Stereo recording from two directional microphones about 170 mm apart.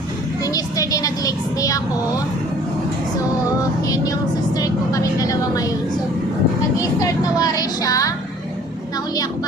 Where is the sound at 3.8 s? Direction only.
20° left (ahead or behind).